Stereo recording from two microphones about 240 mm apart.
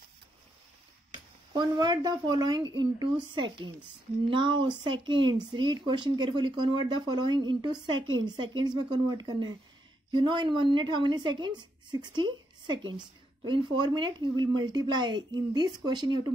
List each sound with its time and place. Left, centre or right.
1.5 s a woman's voice: centre